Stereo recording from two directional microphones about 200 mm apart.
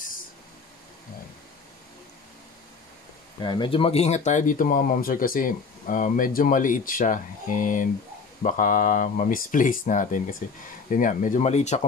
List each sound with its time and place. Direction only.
3.3 s speech: 20° left (ahead or behind)